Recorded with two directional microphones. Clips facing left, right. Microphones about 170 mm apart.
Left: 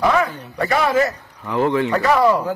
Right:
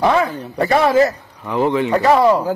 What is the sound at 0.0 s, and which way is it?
Speech, 30° right (ahead or behind).